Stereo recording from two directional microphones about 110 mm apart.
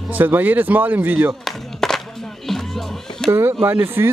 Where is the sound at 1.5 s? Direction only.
5° left (ahead or behind).